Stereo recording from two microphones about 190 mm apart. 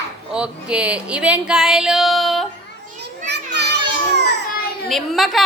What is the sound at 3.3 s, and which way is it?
Children playing, 65° right (ahead or behind).